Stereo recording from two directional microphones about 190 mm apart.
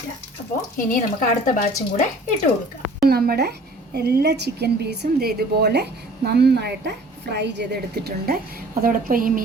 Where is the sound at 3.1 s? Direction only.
55° right (ahead or behind).